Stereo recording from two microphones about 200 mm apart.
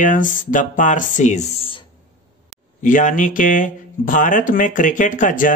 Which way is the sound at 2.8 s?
40° left (ahead or behind).